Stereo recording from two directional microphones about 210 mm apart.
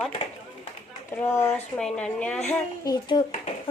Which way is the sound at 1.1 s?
10° left (ahead or behind).